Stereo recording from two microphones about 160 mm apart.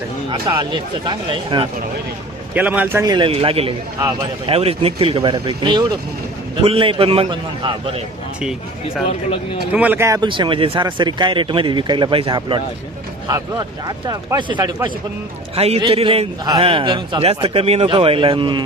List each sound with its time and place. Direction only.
0.4 s a man's voice: 30° right (ahead or behind)
2.6 s a man's voice: 10° right (ahead or behind)
3.1 s speech: 30° right (ahead or behind)
9.7 s a man's voice: 10° right (ahead or behind)
10.2 s a man's voice: 30° right (ahead or behind)